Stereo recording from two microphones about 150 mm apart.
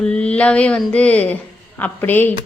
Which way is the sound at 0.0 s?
5° left (ahead or behind).